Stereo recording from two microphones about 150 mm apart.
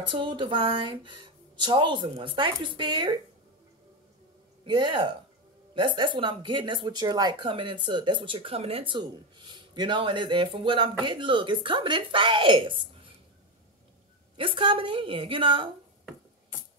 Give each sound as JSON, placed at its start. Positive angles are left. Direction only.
{"t": 0.0, "sound": "speech", "side_deg": -35}
{"t": 4.6, "sound": "speech", "side_deg": -30}
{"t": 14.3, "sound": "speech", "side_deg": -35}